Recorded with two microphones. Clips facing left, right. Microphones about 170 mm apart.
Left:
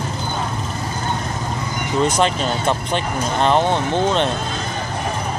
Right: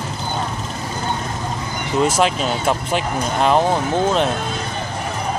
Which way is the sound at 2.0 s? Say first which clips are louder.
Right 1 dB; 5° right (ahead or behind).